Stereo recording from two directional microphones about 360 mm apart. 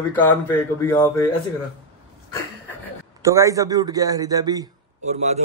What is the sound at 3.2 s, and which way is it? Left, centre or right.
A man's voice, centre.